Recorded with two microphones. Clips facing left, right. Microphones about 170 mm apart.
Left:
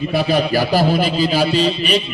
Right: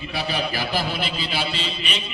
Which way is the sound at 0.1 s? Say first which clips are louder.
Left 9 dB; 40° left (ahead or behind).